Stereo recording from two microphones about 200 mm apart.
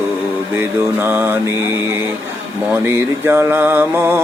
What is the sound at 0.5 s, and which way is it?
Mantra, 10° right (ahead or behind).